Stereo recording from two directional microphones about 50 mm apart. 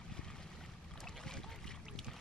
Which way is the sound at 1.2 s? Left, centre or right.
Centre.